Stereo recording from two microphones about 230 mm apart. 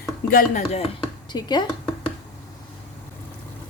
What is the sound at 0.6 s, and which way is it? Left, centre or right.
A woman's voice, left.